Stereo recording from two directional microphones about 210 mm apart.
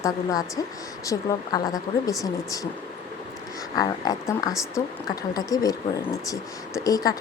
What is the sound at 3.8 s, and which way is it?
A woman's voice, 20° left (ahead or behind).